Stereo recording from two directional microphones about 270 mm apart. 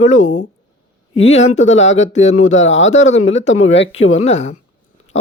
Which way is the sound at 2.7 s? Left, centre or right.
Left.